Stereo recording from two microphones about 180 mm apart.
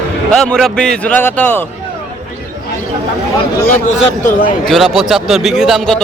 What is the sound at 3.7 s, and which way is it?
Speech, 40° left (ahead or behind).